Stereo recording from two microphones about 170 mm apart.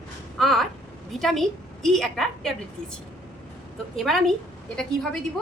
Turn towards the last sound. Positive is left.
turn(degrees=5)  # may be behind; listen again after turning